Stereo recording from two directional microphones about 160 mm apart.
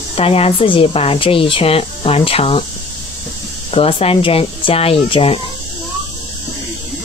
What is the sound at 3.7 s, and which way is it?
Speech, 35° left (ahead or behind).